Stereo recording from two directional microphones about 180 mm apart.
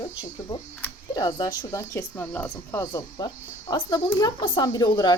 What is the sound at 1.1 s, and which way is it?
Speech, 20° left (ahead or behind).